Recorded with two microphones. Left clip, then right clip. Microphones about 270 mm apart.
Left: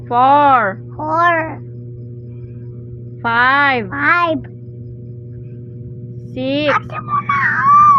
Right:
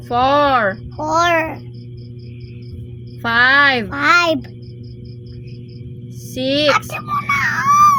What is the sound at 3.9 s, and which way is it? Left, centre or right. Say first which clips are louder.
Speech: right 1 dB; centre.